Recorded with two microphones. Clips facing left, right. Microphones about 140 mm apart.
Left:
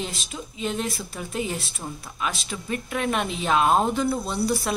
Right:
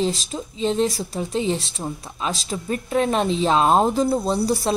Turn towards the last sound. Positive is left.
turn(degrees=-35)  # may be behind; listen again after turning